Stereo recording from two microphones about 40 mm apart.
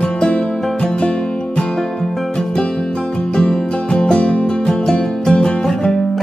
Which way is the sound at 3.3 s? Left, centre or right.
Centre.